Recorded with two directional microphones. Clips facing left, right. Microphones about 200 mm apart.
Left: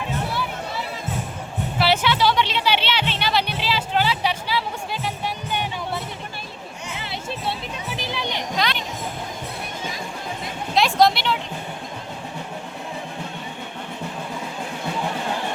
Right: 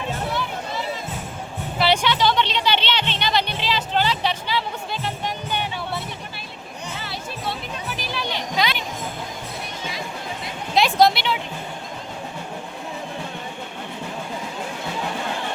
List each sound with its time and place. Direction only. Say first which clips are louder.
1.8 s music: even; 5° left (ahead or behind)
7.0 s music: left 3 dB; 25° left (ahead or behind)
8.5 s children playing: right 2 dB; 5° right (ahead or behind)
10.8 s vehicle: right 1 dB; centre (ahead or behind)